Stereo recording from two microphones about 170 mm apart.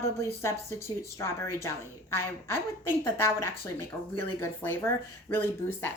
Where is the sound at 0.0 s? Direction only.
15° left (ahead or behind).